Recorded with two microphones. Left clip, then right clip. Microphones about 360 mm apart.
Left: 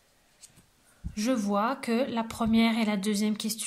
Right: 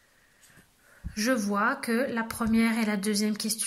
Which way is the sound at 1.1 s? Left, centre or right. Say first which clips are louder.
Right 1 dB; centre.